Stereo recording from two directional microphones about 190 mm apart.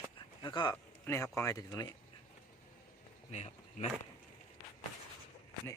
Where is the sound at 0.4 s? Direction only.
20° left (ahead or behind).